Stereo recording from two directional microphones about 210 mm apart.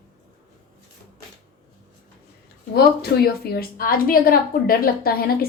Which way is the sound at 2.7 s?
50° left (ahead or behind).